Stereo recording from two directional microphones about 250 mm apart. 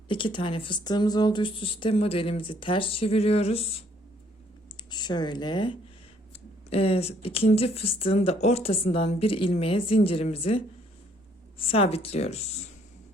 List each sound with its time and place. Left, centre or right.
0.1 s speech: centre
4.9 s speech: centre